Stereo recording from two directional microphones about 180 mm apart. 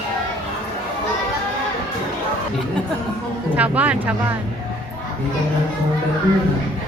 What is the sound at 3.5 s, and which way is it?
Speech, 10° right (ahead or behind).